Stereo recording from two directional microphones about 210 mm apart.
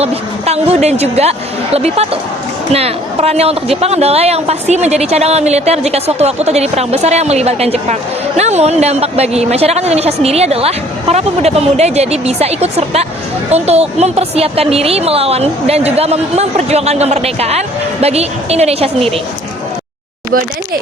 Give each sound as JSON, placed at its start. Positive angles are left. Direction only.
{"t": 0.0, "sound": "a woman's voice", "side_deg": -30}